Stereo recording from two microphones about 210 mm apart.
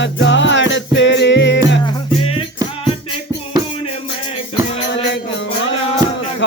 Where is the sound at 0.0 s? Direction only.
60° left (ahead or behind).